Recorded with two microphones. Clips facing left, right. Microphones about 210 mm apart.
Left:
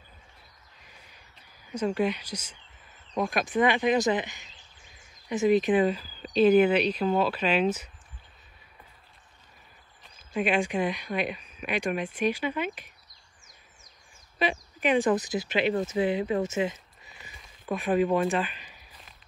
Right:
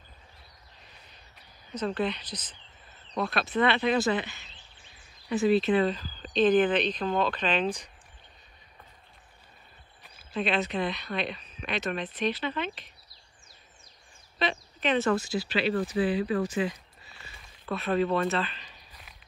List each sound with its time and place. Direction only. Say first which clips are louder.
0.8 s a sound: left 2 dB; 10° left (ahead or behind)
1.7 s speech: left 3 dB; 10° left (ahead or behind)
10.3 s speech: left 2 dB; 10° left (ahead or behind)
14.4 s speech: left 2 dB; 10° left (ahead or behind)